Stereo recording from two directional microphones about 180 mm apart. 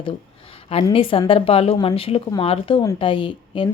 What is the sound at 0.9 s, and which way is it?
A woman's voice, 30° left (ahead or behind).